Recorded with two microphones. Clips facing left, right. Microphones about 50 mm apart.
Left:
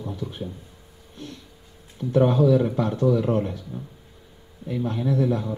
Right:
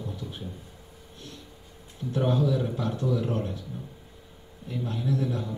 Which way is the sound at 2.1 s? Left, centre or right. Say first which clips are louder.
Left 8 dB; left.